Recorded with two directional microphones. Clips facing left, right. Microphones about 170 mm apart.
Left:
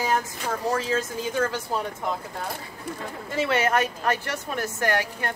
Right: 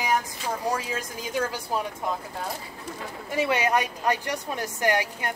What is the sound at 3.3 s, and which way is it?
A woman's voice, 15° right (ahead or behind).